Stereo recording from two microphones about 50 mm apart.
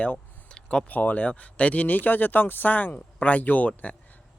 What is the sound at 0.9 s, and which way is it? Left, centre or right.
Speech, left.